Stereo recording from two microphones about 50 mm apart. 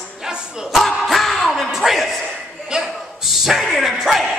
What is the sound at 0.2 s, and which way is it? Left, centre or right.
Music, centre.